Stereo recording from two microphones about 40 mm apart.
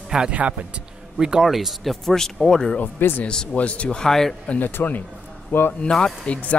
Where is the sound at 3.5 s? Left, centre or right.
Left.